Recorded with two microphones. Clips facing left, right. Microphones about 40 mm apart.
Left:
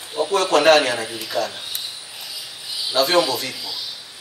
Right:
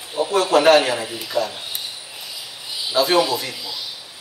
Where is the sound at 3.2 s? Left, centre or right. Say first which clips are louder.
Even; centre.